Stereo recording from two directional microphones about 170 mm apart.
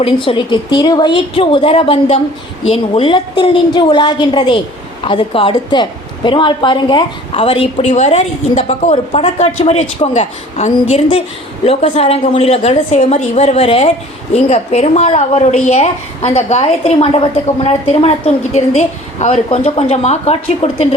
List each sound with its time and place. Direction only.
0.0 s a woman's voice: 30° left (ahead or behind)